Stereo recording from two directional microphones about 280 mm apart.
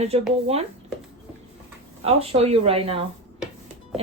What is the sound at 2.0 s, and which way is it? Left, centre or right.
A woman's voice, right.